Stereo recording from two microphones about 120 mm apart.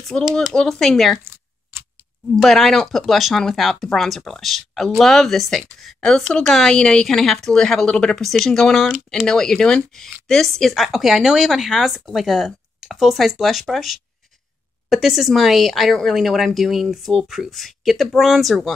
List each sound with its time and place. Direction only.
0.3 s speech: 5° left (ahead or behind)
1.2 s a sound: 20° right (ahead or behind)
2.3 s speech: centre (ahead or behind)